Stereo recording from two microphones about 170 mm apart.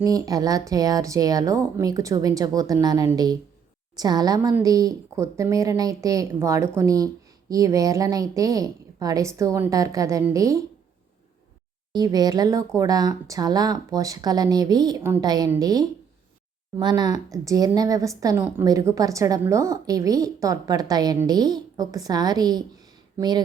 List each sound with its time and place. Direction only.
0.0 s speech: 20° right (ahead or behind)
11.9 s speech: 25° right (ahead or behind)